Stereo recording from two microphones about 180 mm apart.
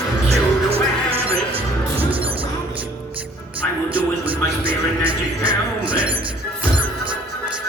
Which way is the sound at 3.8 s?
30° right (ahead or behind).